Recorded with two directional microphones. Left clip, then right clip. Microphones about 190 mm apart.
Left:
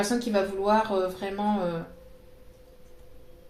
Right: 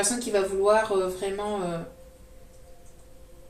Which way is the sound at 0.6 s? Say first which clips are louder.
Right 3 dB; 30° left (ahead or behind).